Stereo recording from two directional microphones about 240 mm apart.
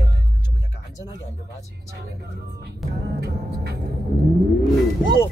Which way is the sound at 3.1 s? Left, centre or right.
Right.